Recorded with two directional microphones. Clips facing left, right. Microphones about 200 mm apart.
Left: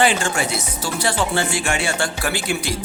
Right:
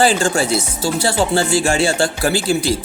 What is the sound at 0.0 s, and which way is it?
Speech, 30° right (ahead or behind).